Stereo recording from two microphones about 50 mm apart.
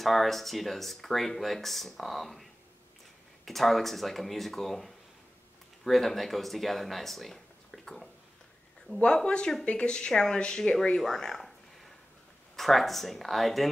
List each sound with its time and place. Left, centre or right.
0.0 s speech: centre
3.4 s speech: centre
9.0 s speech: centre